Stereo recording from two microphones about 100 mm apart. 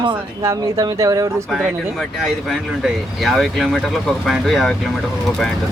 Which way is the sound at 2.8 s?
Centre (ahead or behind).